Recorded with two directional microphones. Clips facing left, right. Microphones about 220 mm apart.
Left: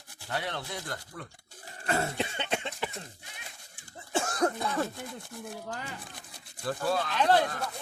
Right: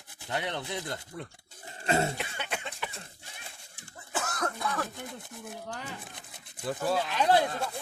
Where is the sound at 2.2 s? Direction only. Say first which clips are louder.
Left 5 dB; 25° left (ahead or behind).